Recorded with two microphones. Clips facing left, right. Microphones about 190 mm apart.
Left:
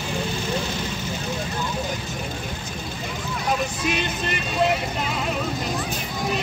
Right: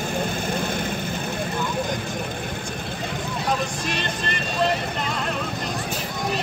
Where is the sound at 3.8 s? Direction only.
5° left (ahead or behind).